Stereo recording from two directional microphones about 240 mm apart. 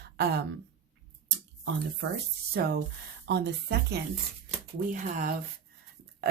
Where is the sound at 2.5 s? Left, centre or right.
Right.